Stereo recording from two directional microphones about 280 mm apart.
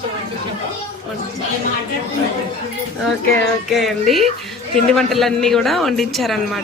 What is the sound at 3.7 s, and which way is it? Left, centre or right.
A man's voice, centre.